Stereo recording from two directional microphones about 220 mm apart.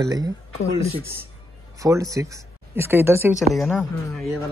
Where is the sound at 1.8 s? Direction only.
15° right (ahead or behind).